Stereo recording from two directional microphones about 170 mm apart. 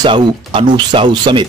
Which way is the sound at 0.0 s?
30° right (ahead or behind).